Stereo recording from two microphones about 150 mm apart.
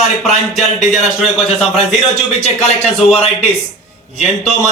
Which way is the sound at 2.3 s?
45° left (ahead or behind).